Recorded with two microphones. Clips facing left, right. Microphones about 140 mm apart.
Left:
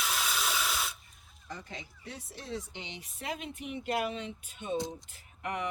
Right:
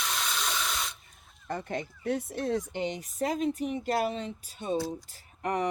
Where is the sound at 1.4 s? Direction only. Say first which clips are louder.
Right 10 dB; 60° right (ahead or behind).